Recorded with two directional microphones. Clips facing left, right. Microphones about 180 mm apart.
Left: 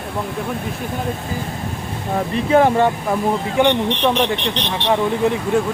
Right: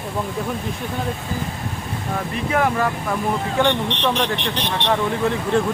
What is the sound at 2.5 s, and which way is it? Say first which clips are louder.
Speech: left 7 dB; 30° left (ahead or behind).